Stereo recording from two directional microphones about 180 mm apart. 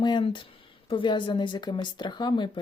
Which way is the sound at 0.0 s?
25° left (ahead or behind).